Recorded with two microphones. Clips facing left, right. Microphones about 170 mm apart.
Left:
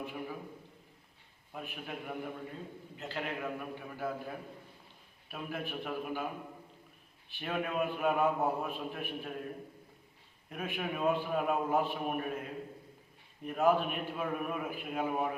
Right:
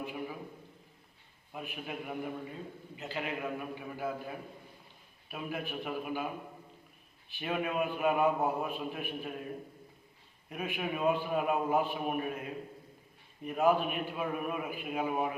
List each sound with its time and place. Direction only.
0.0 s a man's voice: 5° right (ahead or behind)
1.5 s a man's voice: 5° right (ahead or behind)
7.3 s a man's voice: 5° right (ahead or behind)
10.5 s a man's voice: 5° right (ahead or behind)
13.4 s a man's voice: 5° right (ahead or behind)